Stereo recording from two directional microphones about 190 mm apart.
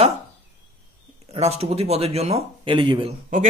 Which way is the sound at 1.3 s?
35° right (ahead or behind).